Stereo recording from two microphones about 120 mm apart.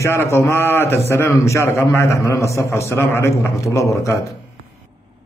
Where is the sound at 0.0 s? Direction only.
25° left (ahead or behind).